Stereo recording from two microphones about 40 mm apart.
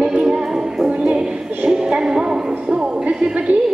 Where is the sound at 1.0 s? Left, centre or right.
Right.